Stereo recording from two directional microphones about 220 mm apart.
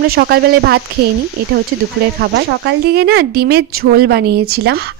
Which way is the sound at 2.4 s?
45° right (ahead or behind).